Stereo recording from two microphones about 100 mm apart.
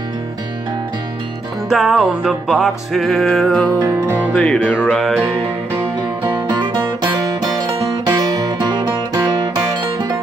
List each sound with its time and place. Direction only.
1.7 s music: centre (ahead or behind)
5.7 s music: 20° right (ahead or behind)
6.3 s music: 50° right (ahead or behind)
8.1 s music: 40° right (ahead or behind)